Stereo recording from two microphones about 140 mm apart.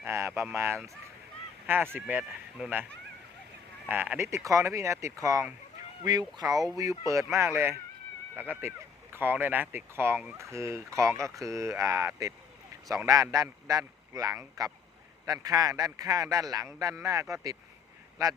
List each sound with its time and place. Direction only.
0.0 s speech: 20° right (ahead or behind)
3.8 s speech: 10° right (ahead or behind)